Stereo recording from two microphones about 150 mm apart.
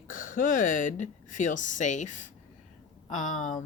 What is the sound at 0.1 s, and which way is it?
Speech, 65° left (ahead or behind).